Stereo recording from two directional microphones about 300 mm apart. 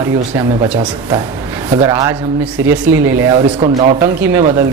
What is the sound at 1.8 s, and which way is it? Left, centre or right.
Speech, centre.